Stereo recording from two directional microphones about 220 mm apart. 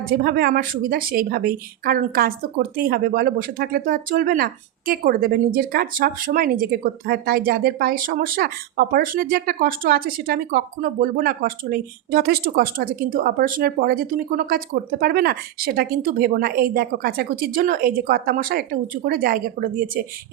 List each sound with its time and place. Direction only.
0.0 s a woman's voice: 40° right (ahead or behind)